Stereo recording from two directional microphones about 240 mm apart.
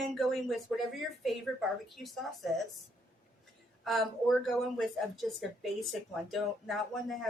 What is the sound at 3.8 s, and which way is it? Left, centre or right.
Speech, centre.